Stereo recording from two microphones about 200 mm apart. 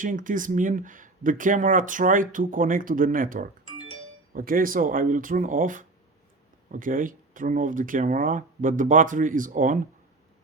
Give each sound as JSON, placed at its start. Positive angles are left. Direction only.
{"t": 0.0, "sound": "speech", "side_deg": -40}
{"t": 4.4, "sound": "speech", "side_deg": -45}